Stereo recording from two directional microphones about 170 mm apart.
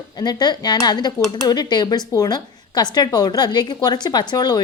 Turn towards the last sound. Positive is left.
turn(degrees=20)  # may be behind; listen again after turning